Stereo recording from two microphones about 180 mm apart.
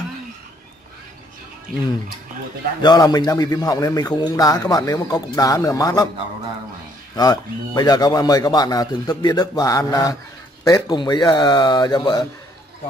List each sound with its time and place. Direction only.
2.8 s a man's voice: 20° left (ahead or behind)
7.2 s a man's voice: 20° left (ahead or behind)